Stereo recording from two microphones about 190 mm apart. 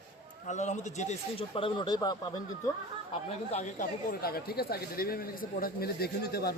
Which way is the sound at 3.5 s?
40° left (ahead or behind).